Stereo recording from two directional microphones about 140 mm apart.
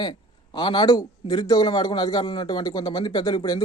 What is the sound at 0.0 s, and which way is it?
A man's voice, 30° left (ahead or behind).